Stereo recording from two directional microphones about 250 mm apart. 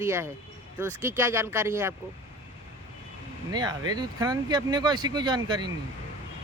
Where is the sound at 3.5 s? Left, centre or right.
Centre.